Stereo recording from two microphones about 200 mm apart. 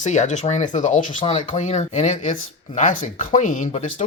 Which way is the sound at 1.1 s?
25° left (ahead or behind).